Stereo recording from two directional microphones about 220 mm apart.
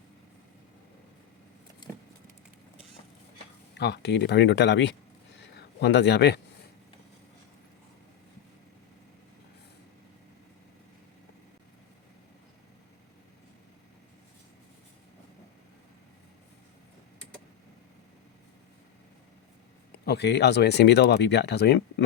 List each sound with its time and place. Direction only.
3.8 s speech: 50° left (ahead or behind)
5.4 s a sound: 50° left (ahead or behind)
19.9 s speech: 50° left (ahead or behind)